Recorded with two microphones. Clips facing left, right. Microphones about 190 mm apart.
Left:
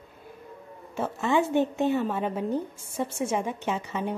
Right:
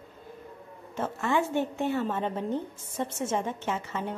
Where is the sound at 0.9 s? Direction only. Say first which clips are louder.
Left 3 dB; 15° left (ahead or behind).